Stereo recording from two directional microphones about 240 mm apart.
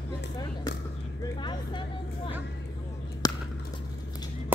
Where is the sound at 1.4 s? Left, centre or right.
Centre.